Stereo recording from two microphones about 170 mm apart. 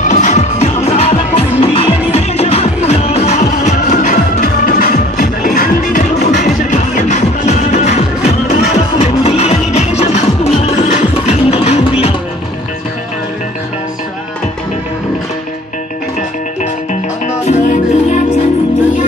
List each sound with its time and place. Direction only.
0.1 s music: 45° left (ahead or behind); by 6.4 s 60° left (ahead or behind)
6.4 s music: 45° left (ahead or behind)
17.5 s music: 45° left (ahead or behind)